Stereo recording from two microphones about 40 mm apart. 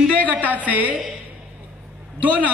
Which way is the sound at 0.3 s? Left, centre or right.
Right.